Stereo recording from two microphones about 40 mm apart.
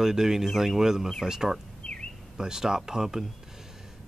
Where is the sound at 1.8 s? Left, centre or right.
Left.